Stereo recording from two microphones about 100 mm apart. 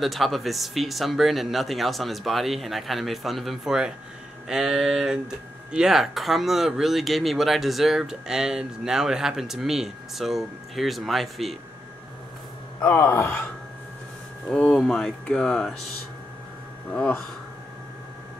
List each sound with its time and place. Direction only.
0.0 s speech: centre (ahead or behind)
12.9 s speech: 30° left (ahead or behind)
14.5 s speech: 5° left (ahead or behind)
16.9 s speech: 10° left (ahead or behind)